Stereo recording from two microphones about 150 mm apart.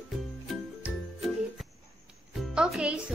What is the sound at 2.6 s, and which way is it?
Speech, 5° right (ahead or behind).